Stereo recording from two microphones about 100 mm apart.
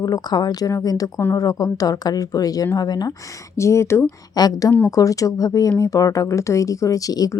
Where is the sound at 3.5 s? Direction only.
30° left (ahead or behind).